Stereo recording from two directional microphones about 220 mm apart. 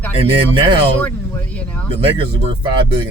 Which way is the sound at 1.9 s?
25° right (ahead or behind).